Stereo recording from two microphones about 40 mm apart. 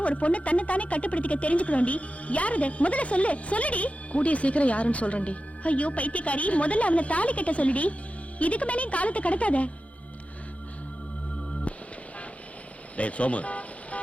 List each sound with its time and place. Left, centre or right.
0.0 s speech: left
13.0 s vehicle: left